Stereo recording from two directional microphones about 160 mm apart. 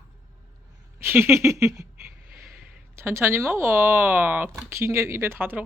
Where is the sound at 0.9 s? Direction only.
15° right (ahead or behind).